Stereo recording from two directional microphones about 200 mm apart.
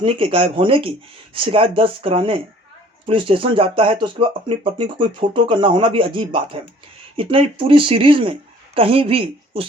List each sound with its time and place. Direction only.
0.0 s speech: 25° right (ahead or behind)